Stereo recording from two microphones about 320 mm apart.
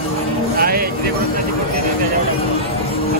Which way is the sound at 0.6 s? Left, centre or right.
Right.